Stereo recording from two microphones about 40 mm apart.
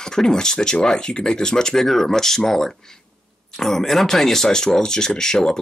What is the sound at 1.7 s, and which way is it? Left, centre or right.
Speech, centre.